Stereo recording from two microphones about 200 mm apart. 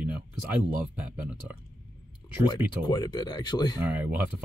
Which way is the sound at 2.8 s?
20° left (ahead or behind).